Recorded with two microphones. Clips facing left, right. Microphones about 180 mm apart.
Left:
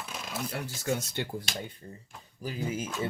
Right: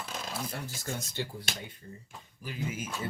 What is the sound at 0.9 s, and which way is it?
Speech, 65° left (ahead or behind).